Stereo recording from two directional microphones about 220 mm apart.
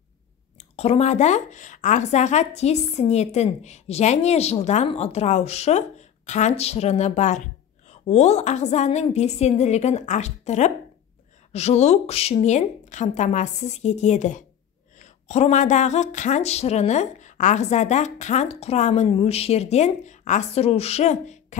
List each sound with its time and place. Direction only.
0.6 s a woman's voice: 30° left (ahead or behind)